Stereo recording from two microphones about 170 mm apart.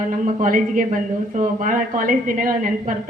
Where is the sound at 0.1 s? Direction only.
50° right (ahead or behind).